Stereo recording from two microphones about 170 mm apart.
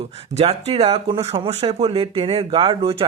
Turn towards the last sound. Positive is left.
turn(degrees=-30)  # may be behind; listen again after turning